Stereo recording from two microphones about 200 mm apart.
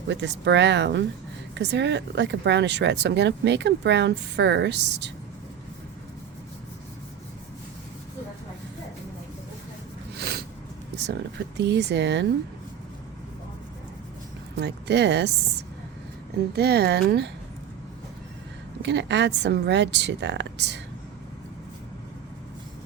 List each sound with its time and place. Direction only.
0.1 s speech: 60° right (ahead or behind)
10.2 s a sound: 55° right (ahead or behind)
10.9 s speech: 55° right (ahead or behind)
14.5 s speech: 60° right (ahead or behind)
16.6 s speech: 55° right (ahead or behind)
18.8 s speech: 60° right (ahead or behind)